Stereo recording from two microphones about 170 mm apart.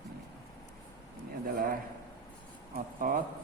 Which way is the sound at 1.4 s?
55° right (ahead or behind).